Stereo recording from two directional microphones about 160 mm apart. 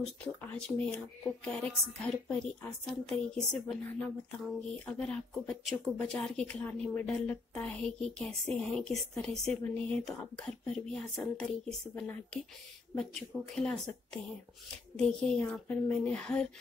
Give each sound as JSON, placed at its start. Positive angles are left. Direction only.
{"t": 0.2, "sound": "speech", "side_deg": 5}
{"t": 12.9, "sound": "speech", "side_deg": 5}